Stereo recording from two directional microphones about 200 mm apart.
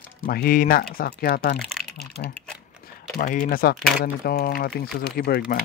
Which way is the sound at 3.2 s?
45° left (ahead or behind).